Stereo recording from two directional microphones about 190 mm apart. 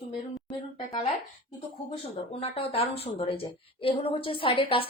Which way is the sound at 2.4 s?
30° left (ahead or behind).